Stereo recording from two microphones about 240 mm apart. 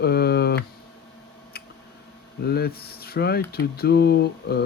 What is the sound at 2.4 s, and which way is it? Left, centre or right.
Mantra, left.